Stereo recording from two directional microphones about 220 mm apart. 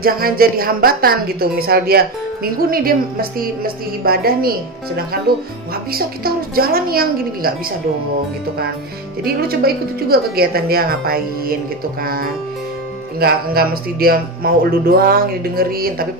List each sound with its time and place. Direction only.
0.0 s a woman's voice: 40° right (ahead or behind)
9.2 s a woman's voice: 45° right (ahead or behind)